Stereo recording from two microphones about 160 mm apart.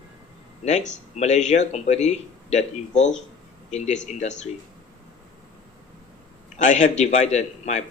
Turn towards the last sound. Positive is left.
turn(degrees=45)  # may be behind; listen again after turning